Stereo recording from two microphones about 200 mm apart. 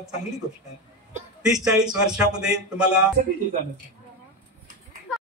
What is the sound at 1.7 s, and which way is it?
A man's voice, 5° right (ahead or behind).